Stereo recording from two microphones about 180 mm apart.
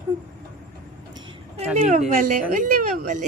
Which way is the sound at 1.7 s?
40° right (ahead or behind).